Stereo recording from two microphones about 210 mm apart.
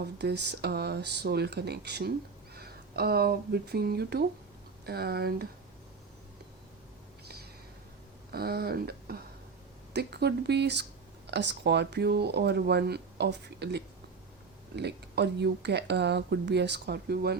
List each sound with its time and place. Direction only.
0.0 s speech: 50° right (ahead or behind)
8.3 s speech: 45° right (ahead or behind)